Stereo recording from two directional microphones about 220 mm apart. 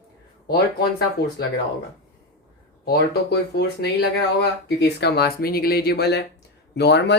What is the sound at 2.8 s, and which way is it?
Speech, 45° left (ahead or behind).